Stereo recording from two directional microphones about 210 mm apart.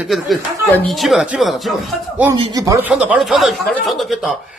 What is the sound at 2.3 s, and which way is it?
Speech, 25° right (ahead or behind).